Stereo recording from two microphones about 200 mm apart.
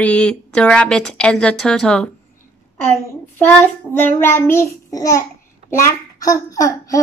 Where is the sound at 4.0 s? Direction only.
10° left (ahead or behind).